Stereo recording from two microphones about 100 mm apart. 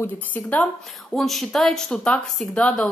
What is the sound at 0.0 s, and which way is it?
Speech, 15° left (ahead or behind).